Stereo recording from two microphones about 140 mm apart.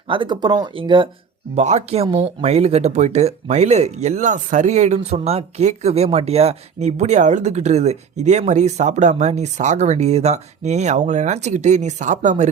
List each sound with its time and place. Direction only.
0.1 s speech: 35° right (ahead or behind)
1.5 s speech: 55° right (ahead or behind)